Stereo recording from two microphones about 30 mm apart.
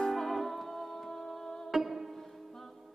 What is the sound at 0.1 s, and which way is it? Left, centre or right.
Music, centre.